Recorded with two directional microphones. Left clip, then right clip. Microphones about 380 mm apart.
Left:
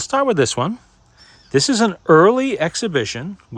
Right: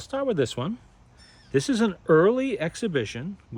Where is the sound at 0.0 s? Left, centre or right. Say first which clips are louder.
Left 9 dB; centre.